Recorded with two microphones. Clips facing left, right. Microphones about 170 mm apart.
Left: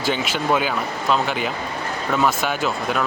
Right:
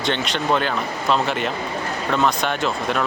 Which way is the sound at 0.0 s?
5° left (ahead or behind).